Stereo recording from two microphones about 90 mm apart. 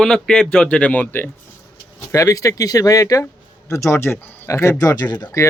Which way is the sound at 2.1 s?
35° left (ahead or behind).